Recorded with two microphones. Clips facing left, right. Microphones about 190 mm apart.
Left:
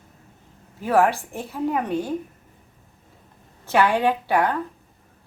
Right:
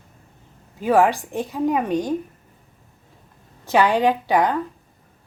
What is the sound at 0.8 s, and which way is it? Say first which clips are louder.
Speech: right 2 dB; 15° right (ahead or behind).